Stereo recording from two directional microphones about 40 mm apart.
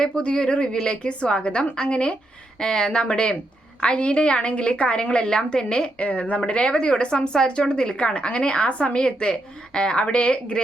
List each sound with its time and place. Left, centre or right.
0.0 s speech: left